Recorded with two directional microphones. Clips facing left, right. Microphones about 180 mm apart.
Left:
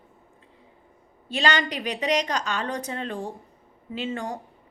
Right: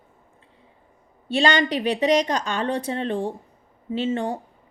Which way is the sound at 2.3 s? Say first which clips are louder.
Right 4 dB; 30° right (ahead or behind).